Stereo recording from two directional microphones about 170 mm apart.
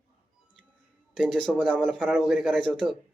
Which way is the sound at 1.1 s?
Centre (ahead or behind).